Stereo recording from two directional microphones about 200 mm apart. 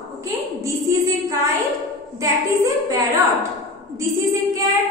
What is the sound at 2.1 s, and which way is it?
A woman's voice, 15° right (ahead or behind).